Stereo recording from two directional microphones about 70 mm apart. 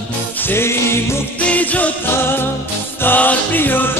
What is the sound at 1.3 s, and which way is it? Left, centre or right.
Music, left.